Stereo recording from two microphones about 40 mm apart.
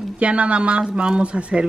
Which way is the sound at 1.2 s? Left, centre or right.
Right.